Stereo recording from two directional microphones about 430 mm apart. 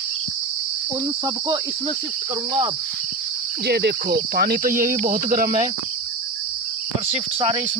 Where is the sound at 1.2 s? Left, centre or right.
Centre.